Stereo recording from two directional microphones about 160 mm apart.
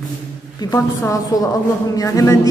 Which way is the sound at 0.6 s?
20° left (ahead or behind).